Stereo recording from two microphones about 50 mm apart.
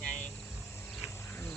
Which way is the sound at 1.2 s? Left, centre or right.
Left.